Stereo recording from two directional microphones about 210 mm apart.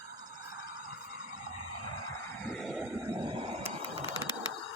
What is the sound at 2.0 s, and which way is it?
Vehicle, 15° left (ahead or behind).